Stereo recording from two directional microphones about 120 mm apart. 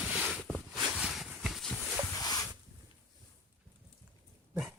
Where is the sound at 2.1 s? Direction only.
30° left (ahead or behind).